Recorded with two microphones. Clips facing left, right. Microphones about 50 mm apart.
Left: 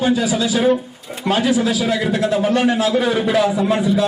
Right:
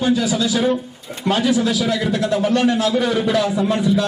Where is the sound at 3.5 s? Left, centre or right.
Centre.